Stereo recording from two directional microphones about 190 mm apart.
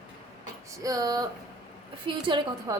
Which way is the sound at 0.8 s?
20° right (ahead or behind).